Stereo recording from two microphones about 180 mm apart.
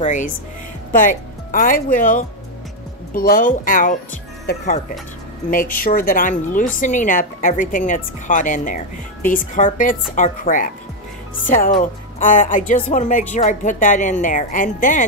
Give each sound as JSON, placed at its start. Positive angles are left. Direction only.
{"t": 0.0, "sound": "speech", "side_deg": 45}